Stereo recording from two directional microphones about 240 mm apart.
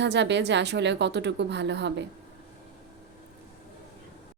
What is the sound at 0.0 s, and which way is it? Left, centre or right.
A woman's voice, right.